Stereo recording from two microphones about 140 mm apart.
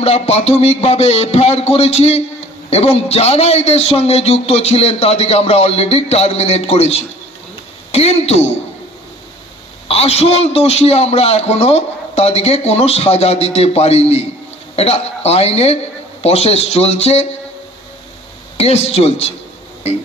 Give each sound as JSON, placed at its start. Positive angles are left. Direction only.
{"t": 0.0, "sound": "a man's voice", "side_deg": 45}
{"t": 9.8, "sound": "a man's voice", "side_deg": 45}
{"t": 18.6, "sound": "a man's voice", "side_deg": 50}